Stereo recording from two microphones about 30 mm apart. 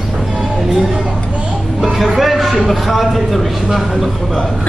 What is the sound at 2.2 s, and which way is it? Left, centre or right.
A man's voice, centre.